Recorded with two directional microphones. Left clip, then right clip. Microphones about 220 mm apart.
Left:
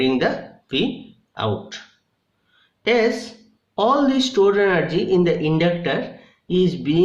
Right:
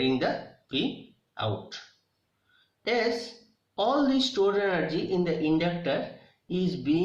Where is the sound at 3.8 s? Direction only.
45° left (ahead or behind).